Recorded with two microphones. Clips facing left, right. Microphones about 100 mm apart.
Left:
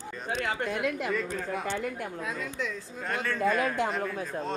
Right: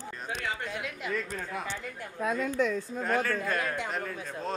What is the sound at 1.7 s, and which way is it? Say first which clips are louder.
Speech: left 7 dB; 60° left (ahead or behind).